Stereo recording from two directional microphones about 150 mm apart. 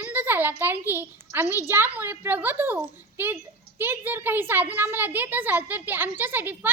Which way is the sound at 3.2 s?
15° right (ahead or behind).